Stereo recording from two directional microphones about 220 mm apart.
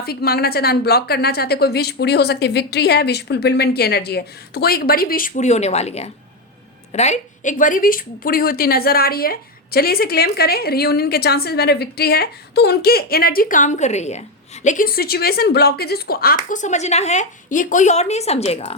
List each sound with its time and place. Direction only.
0.0 s speech: 45° left (ahead or behind); by 18.8 s 30° left (ahead or behind)